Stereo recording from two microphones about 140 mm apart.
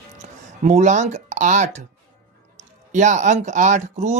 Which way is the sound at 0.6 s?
55° right (ahead or behind).